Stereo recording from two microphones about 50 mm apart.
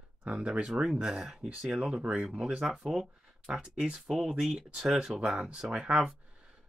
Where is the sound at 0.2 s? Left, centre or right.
Right.